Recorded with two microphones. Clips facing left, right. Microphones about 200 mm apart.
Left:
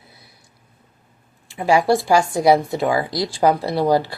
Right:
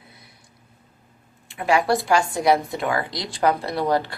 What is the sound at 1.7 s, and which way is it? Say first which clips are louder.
A woman's voice: left 4 dB; 30° left (ahead or behind).